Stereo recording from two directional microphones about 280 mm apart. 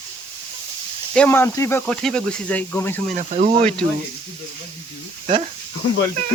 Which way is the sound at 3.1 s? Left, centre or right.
Right.